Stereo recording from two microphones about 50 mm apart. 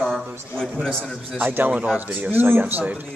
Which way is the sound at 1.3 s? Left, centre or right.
Right.